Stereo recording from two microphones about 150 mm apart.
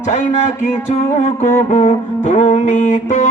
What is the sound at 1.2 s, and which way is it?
Music, 50° left (ahead or behind).